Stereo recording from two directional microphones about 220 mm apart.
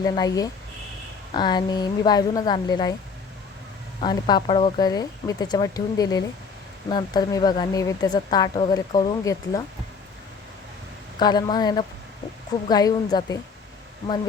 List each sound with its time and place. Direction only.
0.0 s a woman's voice: 15° left (ahead or behind)
4.0 s a woman's voice: 20° left (ahead or behind)
11.2 s a woman's voice: 20° left (ahead or behind)